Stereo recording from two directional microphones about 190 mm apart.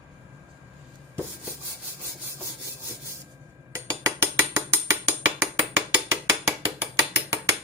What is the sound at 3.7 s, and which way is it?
Mechanisms, 15° right (ahead or behind).